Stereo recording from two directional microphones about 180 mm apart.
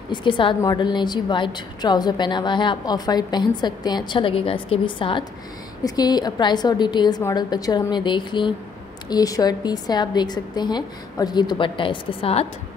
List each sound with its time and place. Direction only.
0.1 s a woman's voice: 25° left (ahead or behind)